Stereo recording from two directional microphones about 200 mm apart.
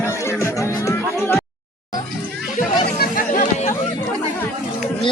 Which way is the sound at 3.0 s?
45° left (ahead or behind).